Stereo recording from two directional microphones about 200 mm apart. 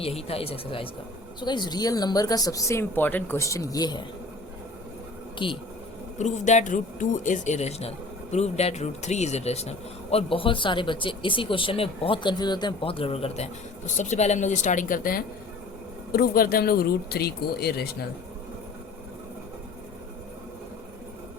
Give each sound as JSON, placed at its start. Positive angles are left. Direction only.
{"t": 0.0, "sound": "speech", "side_deg": 30}
{"t": 5.4, "sound": "speech", "side_deg": 25}
{"t": 6.1, "sound": "speech", "side_deg": 35}